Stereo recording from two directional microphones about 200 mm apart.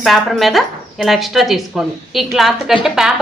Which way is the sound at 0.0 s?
Centre (ahead or behind).